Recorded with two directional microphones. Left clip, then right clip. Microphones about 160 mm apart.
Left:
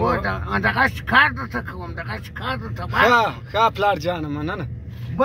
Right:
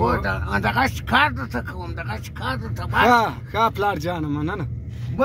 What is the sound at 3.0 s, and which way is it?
Speech, 70° right (ahead or behind).